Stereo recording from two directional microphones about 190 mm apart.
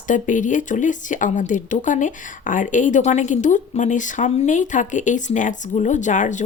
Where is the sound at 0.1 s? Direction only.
40° left (ahead or behind).